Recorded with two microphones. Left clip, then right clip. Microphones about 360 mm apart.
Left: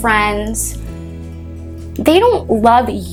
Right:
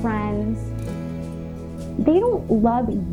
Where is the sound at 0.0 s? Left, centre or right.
Centre.